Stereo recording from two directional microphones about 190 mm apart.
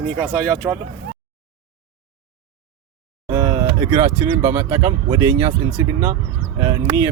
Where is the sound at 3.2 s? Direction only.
15° right (ahead or behind).